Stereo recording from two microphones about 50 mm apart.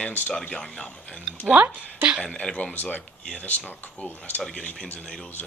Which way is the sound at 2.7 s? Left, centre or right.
Left.